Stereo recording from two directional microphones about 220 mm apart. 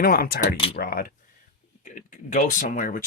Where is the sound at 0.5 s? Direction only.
25° left (ahead or behind).